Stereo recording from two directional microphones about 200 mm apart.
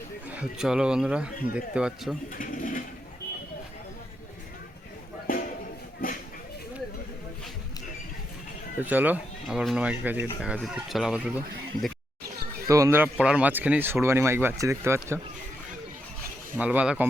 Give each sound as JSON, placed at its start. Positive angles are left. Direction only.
{"t": 0.3, "sound": "speech", "side_deg": -5}
{"t": 2.3, "sound": "speech", "side_deg": 45}
{"t": 6.0, "sound": "a sound", "side_deg": 45}
{"t": 8.8, "sound": "speech", "side_deg": -10}
{"t": 12.6, "sound": "speech", "side_deg": -15}
{"t": 16.6, "sound": "speech", "side_deg": -5}